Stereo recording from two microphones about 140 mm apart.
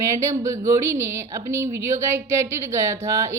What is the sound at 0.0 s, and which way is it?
A woman's voice, 20° right (ahead or behind).